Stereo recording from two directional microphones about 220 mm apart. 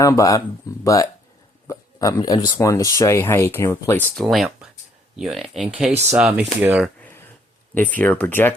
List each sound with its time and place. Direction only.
0.0 s speech: 15° left (ahead or behind); by 6.9 s 5° right (ahead or behind)
7.0 s a sound: 10° left (ahead or behind)
7.9 s speech: 5° left (ahead or behind)